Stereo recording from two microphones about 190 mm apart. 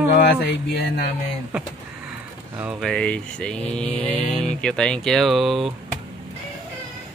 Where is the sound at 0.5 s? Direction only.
60° left (ahead or behind).